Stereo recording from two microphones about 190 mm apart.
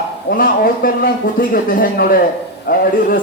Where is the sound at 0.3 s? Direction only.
50° left (ahead or behind).